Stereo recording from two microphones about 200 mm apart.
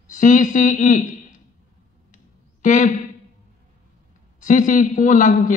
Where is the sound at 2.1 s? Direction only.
40° left (ahead or behind).